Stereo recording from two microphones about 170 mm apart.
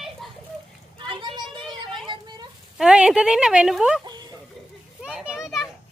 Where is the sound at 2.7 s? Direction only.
5° right (ahead or behind).